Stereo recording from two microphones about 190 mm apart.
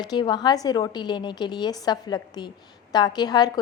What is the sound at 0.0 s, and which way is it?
A woman's voice, 25° left (ahead or behind).